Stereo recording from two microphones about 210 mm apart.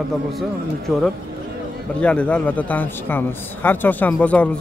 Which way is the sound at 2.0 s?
5° left (ahead or behind).